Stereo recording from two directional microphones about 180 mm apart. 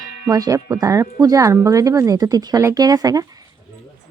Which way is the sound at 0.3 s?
20° right (ahead or behind).